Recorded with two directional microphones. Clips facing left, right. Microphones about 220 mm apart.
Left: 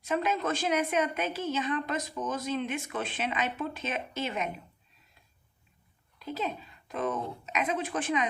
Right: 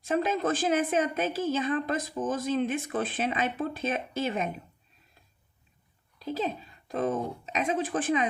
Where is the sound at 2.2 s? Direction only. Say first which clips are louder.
Right 5 dB; 50° right (ahead or behind).